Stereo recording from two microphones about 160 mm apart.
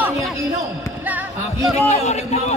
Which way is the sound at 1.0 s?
10° right (ahead or behind).